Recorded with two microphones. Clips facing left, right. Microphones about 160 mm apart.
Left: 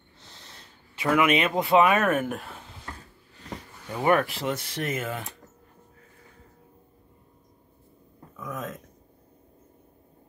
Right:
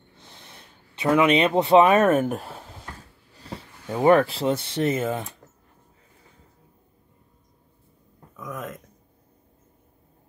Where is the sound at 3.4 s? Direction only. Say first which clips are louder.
Right 1 dB; 30° right (ahead or behind).